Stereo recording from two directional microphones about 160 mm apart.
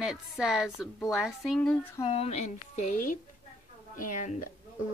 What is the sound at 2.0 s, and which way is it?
A woman's voice, 35° left (ahead or behind).